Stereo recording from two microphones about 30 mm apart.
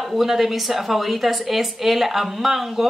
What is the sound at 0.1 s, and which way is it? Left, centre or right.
Speech, centre.